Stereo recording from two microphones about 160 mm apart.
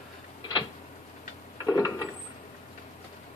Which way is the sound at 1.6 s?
25° left (ahead or behind).